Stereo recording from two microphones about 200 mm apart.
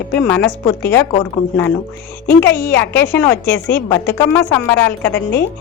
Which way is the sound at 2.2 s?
10° left (ahead or behind).